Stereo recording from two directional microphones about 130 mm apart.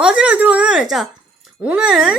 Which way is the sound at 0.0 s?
5° right (ahead or behind).